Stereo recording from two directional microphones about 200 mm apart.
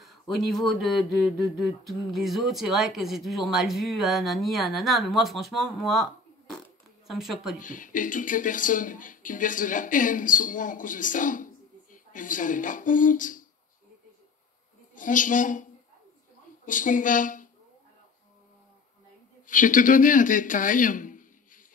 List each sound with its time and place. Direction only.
0.0 s speech: centre (ahead or behind)
7.1 s speech: centre (ahead or behind)
7.5 s speech: 40° left (ahead or behind)
15.0 s speech: 40° left (ahead or behind)
16.6 s speech: 40° left (ahead or behind)
19.4 s speech: 40° left (ahead or behind)